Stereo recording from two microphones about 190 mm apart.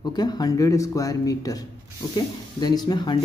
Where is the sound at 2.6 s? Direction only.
20° left (ahead or behind).